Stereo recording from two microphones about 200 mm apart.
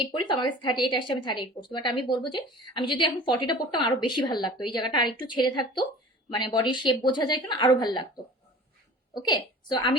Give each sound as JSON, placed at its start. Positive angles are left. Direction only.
{"t": 0.1, "sound": "a woman's voice", "side_deg": 25}